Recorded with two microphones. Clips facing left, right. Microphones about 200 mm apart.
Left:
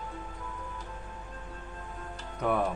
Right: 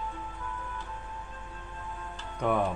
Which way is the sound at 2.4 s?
5° left (ahead or behind).